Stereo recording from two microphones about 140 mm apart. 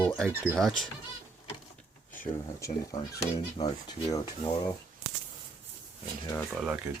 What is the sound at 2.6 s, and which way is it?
Speech, 20° left (ahead or behind).